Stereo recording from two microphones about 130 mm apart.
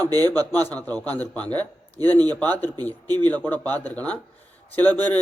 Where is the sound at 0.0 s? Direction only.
30° right (ahead or behind).